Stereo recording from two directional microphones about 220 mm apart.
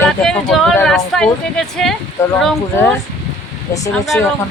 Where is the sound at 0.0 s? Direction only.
5° left (ahead or behind).